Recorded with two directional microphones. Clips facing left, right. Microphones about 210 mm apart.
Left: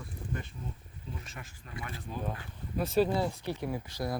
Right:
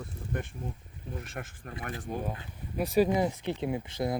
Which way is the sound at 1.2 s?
55° right (ahead or behind).